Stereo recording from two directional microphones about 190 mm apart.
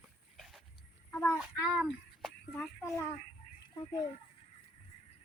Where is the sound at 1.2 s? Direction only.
5° right (ahead or behind).